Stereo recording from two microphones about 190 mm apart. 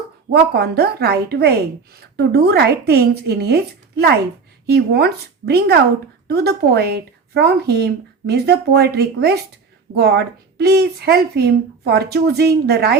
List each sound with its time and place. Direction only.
0.3 s speech: 55° right (ahead or behind)